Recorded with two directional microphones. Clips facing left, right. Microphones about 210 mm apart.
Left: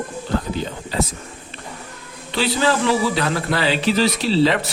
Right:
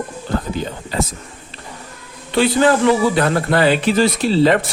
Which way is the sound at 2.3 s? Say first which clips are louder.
Right 5 dB; 50° right (ahead or behind).